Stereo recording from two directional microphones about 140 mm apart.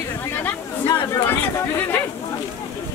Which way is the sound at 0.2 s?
15° left (ahead or behind).